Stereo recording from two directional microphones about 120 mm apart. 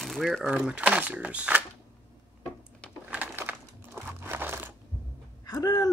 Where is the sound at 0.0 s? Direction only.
Centre (ahead or behind).